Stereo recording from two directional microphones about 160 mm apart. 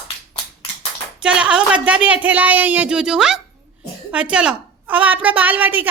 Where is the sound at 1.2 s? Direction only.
5° right (ahead or behind).